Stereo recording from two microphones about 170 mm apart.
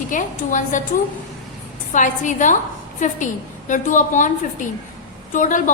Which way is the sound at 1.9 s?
50° left (ahead or behind).